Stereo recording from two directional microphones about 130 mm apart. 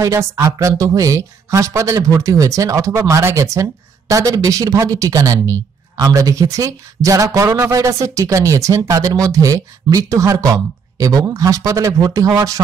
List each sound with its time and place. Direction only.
0.0 s speech: 25° right (ahead or behind)